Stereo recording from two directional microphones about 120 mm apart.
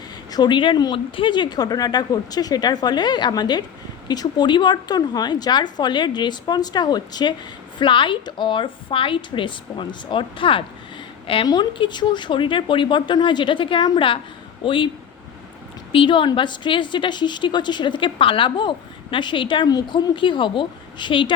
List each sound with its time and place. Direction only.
0.3 s a woman's voice: 35° left (ahead or behind)
15.9 s a woman's voice: 45° left (ahead or behind)